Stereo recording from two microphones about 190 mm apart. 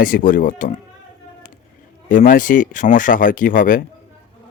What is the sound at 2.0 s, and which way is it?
A man's voice, 45° left (ahead or behind).